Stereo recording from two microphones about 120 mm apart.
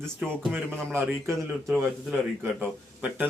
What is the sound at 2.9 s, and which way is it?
Speech, 10° right (ahead or behind).